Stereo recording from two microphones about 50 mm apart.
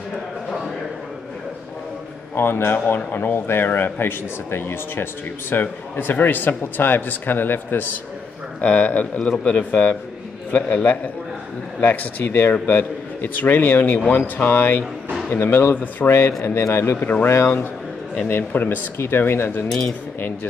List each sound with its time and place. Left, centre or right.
2.3 s a man's voice: left
15.7 s a man's voice: left
16.1 s a man's voice: left
16.9 s a man's voice: left
18.3 s a man's voice: left